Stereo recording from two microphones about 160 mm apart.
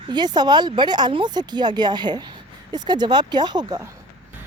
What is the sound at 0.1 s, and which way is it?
Speech, 25° right (ahead or behind).